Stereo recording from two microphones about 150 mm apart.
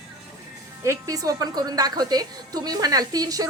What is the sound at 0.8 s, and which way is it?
A woman's voice, 20° right (ahead or behind).